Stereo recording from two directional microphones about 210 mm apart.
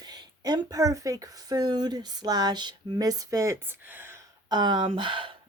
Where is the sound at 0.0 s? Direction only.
20° right (ahead or behind).